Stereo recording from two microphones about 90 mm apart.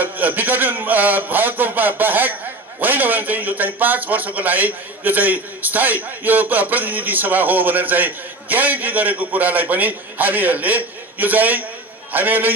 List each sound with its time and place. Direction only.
0.0 s a man's voice: 20° right (ahead or behind)